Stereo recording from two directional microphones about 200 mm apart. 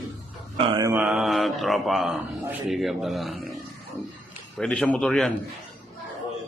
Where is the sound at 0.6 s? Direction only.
20° right (ahead or behind).